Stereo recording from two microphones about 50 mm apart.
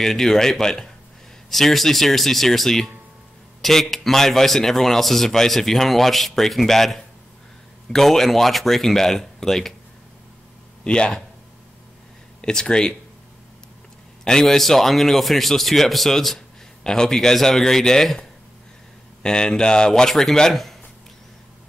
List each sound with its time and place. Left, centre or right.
0.0 s a man's voice: centre
10.8 s a man's voice: centre
12.4 s speech: centre
14.2 s a man's voice: centre
19.2 s a man's voice: centre